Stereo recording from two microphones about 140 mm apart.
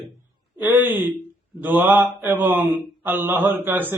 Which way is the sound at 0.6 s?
15° right (ahead or behind).